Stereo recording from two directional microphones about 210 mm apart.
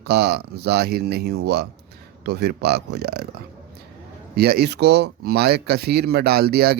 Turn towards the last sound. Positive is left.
turn(degrees=-50)  # may be behind; listen again after turning